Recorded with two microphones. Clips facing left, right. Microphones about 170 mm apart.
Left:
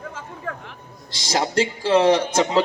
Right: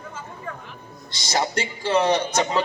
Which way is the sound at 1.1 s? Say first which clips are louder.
Left 2 dB; 90° left.